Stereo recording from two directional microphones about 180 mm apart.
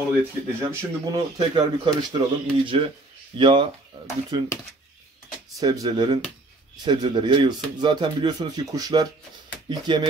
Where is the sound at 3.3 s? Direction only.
30° right (ahead or behind).